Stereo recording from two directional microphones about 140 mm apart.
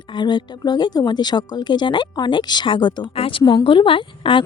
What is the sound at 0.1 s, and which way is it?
Speech, 35° left (ahead or behind).